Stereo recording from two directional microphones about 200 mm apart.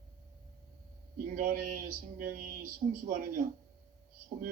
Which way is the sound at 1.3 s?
45° right (ahead or behind).